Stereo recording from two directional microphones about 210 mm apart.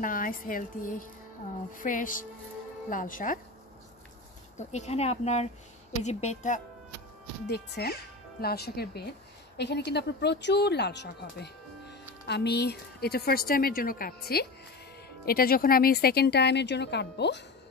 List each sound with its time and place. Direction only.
0.0 s speech: 40° left (ahead or behind)
4.6 s speech: 30° left (ahead or behind)
7.4 s speech: 50° left (ahead or behind)